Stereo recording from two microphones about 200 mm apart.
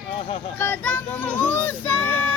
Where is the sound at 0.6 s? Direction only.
10° left (ahead or behind).